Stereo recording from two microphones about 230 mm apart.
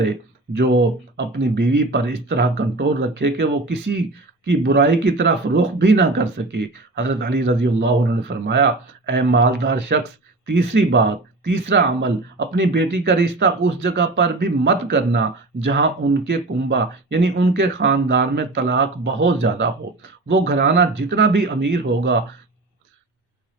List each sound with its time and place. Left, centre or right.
0.5 s speech: right